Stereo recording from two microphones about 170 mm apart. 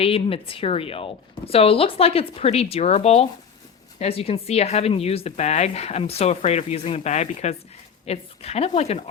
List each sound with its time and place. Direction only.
0.0 s speech: 35° left (ahead or behind)